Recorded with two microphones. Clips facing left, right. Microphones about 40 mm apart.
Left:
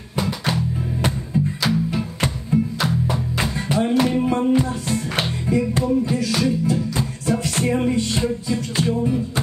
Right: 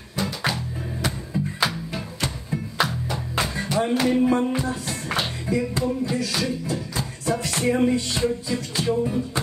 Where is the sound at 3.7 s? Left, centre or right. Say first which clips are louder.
Left 3 dB; left.